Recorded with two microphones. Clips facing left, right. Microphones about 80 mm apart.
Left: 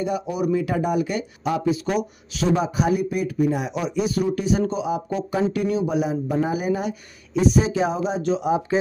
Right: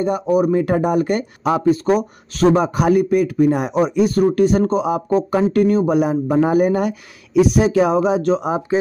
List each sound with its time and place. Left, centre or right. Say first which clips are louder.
0.0 s speech: right 7 dB; right
8.2 s speech: right 3 dB; right